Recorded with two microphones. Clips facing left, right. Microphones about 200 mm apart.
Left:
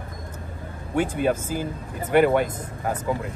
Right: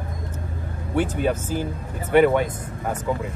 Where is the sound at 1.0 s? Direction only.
10° left (ahead or behind).